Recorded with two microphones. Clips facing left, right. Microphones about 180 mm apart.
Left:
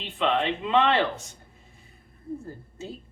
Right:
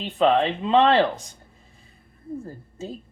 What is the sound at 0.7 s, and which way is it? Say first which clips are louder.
Speech: right 5 dB; 35° right (ahead or behind).